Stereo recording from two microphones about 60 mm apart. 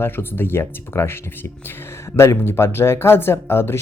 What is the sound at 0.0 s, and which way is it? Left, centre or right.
Speech, left.